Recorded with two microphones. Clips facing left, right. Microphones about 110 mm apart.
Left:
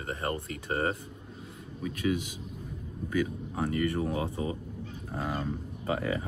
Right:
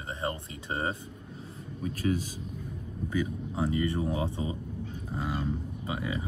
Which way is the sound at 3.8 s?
25° right (ahead or behind).